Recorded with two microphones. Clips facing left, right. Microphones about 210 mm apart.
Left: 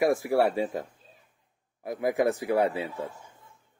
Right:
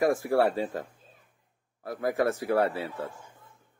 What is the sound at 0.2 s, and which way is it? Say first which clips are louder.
A man's voice: even; 10° left (ahead or behind).